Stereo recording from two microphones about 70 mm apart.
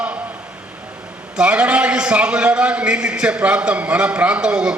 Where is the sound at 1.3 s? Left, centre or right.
Centre.